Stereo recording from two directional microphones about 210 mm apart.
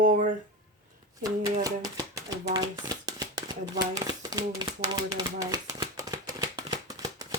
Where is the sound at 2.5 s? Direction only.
20° right (ahead or behind).